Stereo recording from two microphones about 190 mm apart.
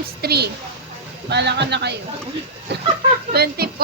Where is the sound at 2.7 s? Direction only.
60° right (ahead or behind).